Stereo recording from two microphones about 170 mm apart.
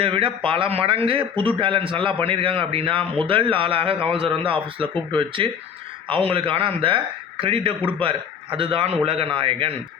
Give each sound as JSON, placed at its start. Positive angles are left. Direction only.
{"t": 0.0, "sound": "a man's voice", "side_deg": -30}